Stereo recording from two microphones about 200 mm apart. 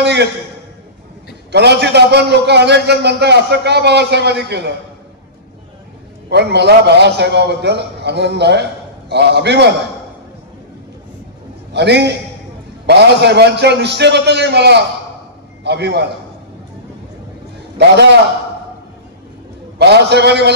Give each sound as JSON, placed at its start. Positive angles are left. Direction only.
{"t": 0.0, "sound": "a sound", "side_deg": -60}
{"t": 1.5, "sound": "a man's voice", "side_deg": -55}
{"t": 6.3, "sound": "a man's voice", "side_deg": -55}
{"t": 11.7, "sound": "a man's voice", "side_deg": -55}
{"t": 17.7, "sound": "a man's voice", "side_deg": -55}
{"t": 19.8, "sound": "a man's voice", "side_deg": -55}